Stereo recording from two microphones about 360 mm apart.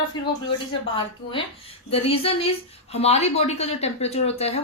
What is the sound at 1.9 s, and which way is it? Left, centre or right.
A woman's voice, centre.